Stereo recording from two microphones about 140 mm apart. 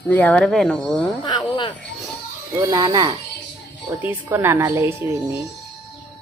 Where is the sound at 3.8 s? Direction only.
10° right (ahead or behind).